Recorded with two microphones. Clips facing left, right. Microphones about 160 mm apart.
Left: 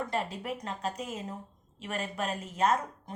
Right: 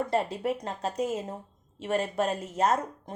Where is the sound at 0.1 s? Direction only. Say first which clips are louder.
Right 6 dB; 35° right (ahead or behind).